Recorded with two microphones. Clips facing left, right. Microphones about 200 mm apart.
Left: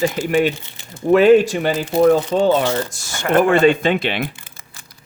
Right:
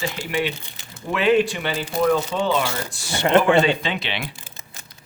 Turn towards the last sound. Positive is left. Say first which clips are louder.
# left 8 dB
turn(degrees=50)  # may be behind; listen again after turning